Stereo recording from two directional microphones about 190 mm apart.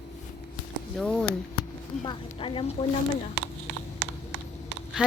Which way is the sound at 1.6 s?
25° left (ahead or behind).